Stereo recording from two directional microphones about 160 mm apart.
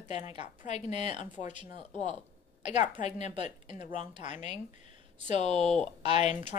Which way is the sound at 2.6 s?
45° left (ahead or behind).